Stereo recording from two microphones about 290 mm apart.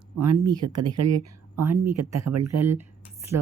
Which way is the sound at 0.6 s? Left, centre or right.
Right.